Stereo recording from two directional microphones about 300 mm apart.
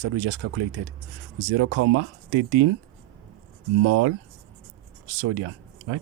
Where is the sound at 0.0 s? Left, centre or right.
Right.